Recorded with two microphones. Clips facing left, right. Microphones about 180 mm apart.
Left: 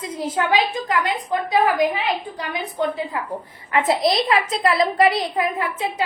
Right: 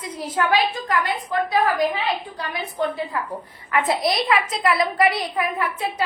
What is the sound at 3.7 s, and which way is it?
A child's voice, 25° left (ahead or behind).